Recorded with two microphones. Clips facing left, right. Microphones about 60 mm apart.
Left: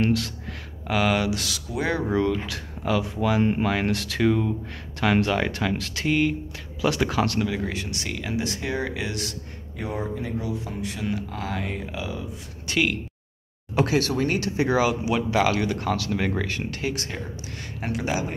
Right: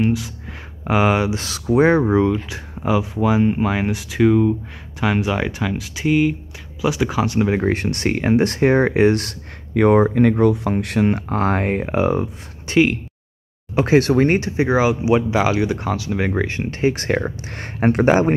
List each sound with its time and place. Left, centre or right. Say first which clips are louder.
0.0 s speech: right 3 dB; centre
0.8 s speech: right 5 dB; right
2.1 s speech: right 6 dB; right
7.4 s speech: right 9 dB; right
9.8 s speech: right 16 dB; right
11.1 s speech: right 10 dB; right
12.6 s speech: right 8 dB; right
14.4 s speech: right 4 dB; right
17.1 s speech: right 13 dB; right